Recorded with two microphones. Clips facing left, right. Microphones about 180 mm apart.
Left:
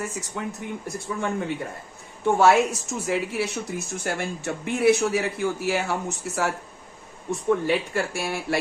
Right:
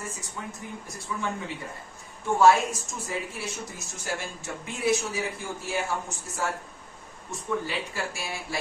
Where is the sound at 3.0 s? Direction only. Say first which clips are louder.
Left 9 dB; 80° left.